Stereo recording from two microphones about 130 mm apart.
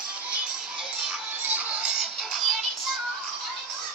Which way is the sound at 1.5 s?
10° right (ahead or behind).